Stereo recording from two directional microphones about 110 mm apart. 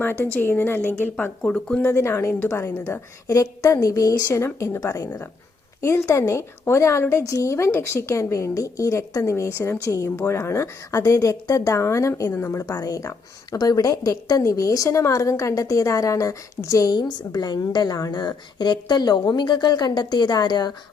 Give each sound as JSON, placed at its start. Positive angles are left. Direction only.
{"t": 0.0, "sound": "a woman's voice", "side_deg": 20}
{"t": 1.8, "sound": "a woman's voice", "side_deg": 25}